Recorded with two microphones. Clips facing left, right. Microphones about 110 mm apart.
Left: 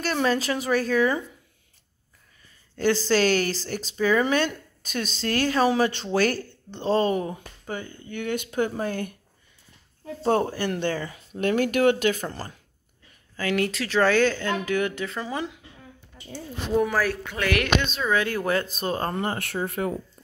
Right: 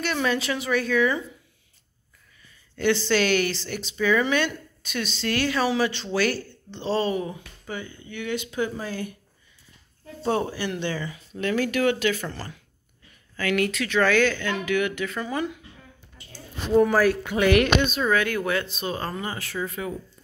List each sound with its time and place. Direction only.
0.0 s speech: 35° left (ahead or behind)
2.8 s speech: 35° left (ahead or behind)
10.2 s speech: 45° left (ahead or behind)
13.4 s speech: 30° left (ahead or behind)
16.9 s speech: 5° right (ahead or behind)
18.1 s speech: 30° left (ahead or behind); by 20.0 s 55° left (ahead or behind)